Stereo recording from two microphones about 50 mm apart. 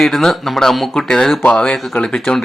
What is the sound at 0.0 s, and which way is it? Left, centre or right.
Speech, centre.